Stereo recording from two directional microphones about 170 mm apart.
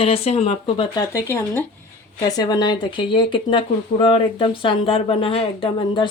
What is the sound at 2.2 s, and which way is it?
Speech, 25° left (ahead or behind).